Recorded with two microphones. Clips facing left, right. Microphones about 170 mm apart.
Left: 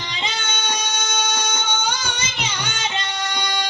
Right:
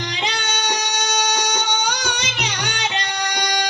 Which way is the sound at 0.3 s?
70° right (ahead or behind).